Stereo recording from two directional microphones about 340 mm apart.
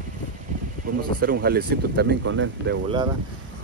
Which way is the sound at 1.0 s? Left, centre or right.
Right.